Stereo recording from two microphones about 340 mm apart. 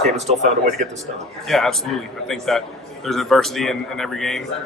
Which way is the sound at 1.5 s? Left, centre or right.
Centre.